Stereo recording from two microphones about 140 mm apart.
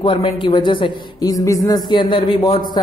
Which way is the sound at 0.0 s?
40° left (ahead or behind).